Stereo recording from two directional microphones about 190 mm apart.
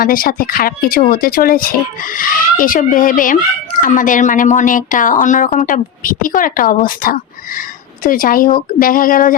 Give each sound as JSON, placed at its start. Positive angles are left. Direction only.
{"t": 0.0, "sound": "speech", "side_deg": 50}